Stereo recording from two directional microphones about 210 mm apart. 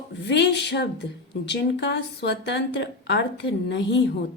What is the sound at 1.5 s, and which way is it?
Speech, 55° left (ahead or behind).